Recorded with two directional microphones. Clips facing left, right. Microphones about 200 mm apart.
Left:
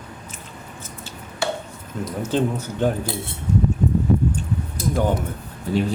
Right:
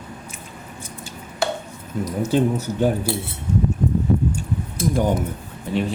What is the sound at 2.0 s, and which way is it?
Speech, 10° right (ahead or behind).